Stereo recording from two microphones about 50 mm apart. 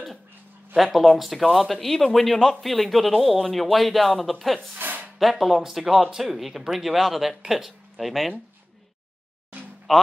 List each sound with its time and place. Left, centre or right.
0.9 s a man's voice: centre
4.7 s a sound: right
5.2 s a man's voice: centre
9.9 s a man's voice: centre